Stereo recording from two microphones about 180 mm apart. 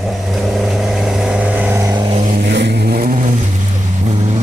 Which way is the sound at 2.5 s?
70° right (ahead or behind).